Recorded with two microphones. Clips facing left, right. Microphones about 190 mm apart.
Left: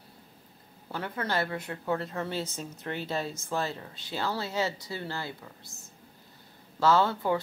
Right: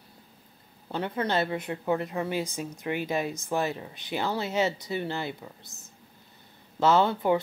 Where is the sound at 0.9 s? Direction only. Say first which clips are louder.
Right 4 dB; 20° right (ahead or behind).